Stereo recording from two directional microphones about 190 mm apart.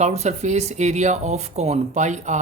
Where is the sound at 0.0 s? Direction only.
35° right (ahead or behind).